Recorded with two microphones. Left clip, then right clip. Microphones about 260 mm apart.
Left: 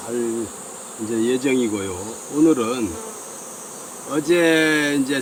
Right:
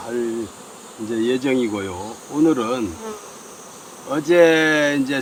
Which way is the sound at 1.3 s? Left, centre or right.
Centre.